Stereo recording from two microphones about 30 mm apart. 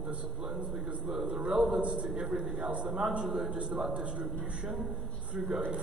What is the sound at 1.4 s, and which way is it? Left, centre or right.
Speech, right.